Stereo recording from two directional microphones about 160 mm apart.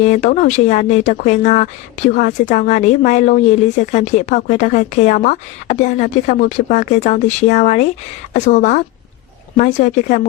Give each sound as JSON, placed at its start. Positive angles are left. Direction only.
{"t": 0.0, "sound": "speech", "side_deg": 50}